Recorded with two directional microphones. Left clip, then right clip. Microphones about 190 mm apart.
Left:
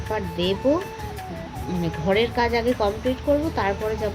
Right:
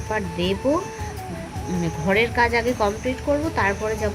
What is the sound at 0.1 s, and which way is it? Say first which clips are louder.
Speech: even; 15° left (ahead or behind).